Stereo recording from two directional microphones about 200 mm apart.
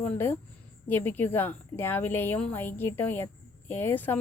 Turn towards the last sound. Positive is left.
turn(degrees=10)  # may be behind; listen again after turning